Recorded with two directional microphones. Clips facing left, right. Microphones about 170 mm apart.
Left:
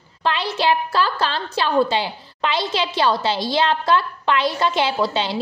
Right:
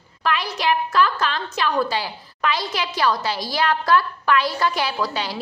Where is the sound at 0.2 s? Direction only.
25° left (ahead or behind).